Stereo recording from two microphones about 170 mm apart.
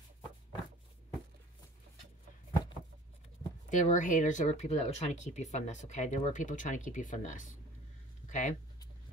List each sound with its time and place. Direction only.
3.7 s speech: 45° left (ahead or behind)